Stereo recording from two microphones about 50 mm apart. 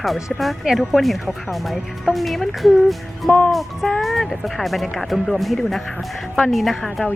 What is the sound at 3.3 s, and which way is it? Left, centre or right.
Music, left.